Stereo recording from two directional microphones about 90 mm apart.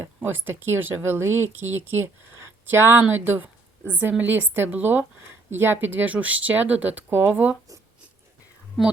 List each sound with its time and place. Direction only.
0.0 s speech: 25° right (ahead or behind)
8.8 s a woman's voice: centre (ahead or behind)